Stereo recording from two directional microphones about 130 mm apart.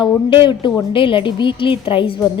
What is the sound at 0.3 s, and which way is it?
A woman's voice, 40° left (ahead or behind).